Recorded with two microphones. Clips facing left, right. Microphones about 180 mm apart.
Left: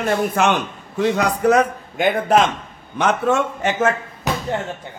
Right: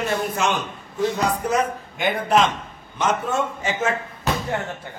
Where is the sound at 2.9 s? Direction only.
70° left (ahead or behind); by 3.9 s 55° left (ahead or behind).